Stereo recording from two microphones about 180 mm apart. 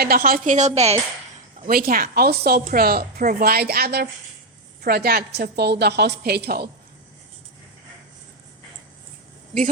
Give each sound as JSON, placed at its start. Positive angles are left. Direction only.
{"t": 0.0, "sound": "a woman's voice", "side_deg": -55}
{"t": 1.6, "sound": "a woman's voice", "side_deg": -55}